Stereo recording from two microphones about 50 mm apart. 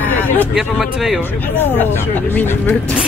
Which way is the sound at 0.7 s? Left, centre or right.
Centre.